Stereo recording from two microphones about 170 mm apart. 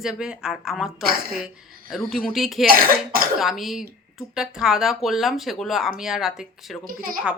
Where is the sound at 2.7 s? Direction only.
60° right (ahead or behind).